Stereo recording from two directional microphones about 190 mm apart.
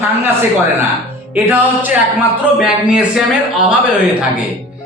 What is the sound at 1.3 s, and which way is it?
A man's voice, 10° right (ahead or behind).